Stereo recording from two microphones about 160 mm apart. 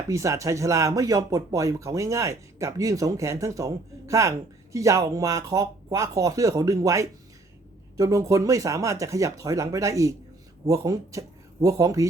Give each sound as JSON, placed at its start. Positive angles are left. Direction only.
{"t": 0.1, "sound": "speech", "side_deg": -20}